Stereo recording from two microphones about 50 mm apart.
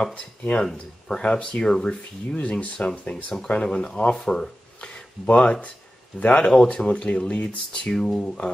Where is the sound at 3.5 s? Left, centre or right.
Centre.